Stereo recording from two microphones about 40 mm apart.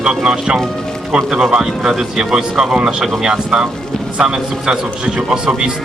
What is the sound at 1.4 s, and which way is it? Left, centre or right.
A man's voice, centre.